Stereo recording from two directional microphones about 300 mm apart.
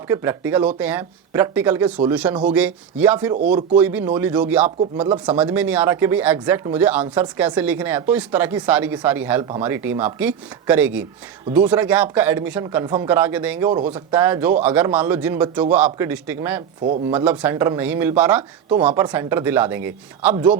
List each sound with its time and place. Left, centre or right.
0.1 s speech: centre
16.8 s speech: right
17.2 s speech: centre